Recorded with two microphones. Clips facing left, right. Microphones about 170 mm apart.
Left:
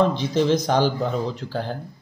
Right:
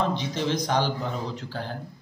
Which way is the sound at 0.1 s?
35° left (ahead or behind).